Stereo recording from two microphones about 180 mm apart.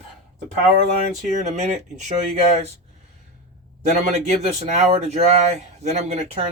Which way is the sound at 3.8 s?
35° right (ahead or behind).